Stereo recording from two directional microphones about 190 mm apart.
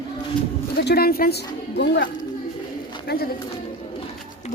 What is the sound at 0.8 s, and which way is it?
A woman's voice, 55° left (ahead or behind).